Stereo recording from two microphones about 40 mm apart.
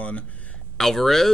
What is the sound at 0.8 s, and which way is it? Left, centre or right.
Speech, centre.